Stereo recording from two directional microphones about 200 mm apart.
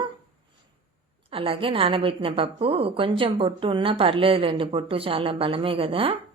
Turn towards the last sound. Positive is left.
turn(degrees=-30)  # may be behind; listen again after turning